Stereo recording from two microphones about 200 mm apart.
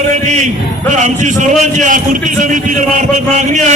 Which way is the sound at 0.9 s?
35° right (ahead or behind).